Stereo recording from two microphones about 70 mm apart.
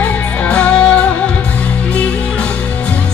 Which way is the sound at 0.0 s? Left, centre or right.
Centre.